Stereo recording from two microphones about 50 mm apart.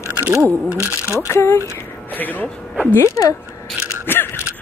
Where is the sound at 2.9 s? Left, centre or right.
Left.